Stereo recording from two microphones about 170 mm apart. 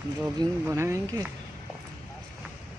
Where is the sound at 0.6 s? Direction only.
15° right (ahead or behind).